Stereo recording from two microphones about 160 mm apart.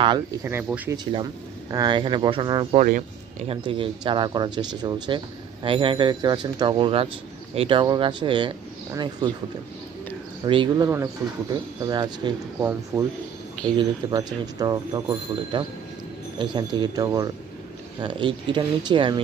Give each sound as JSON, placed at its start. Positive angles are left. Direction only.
{"t": 0.4, "sound": "speech", "side_deg": -15}
{"t": 0.9, "sound": "a man's voice", "side_deg": -25}
{"t": 2.8, "sound": "speech", "side_deg": -45}
{"t": 3.6, "sound": "a man's voice", "side_deg": -30}
{"t": 10.4, "sound": "a man's voice", "side_deg": -30}
{"t": 13.7, "sound": "a man's voice", "side_deg": -25}